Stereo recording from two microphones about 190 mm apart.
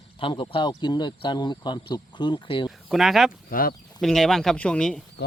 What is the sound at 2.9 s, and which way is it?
Speech, centre (ahead or behind).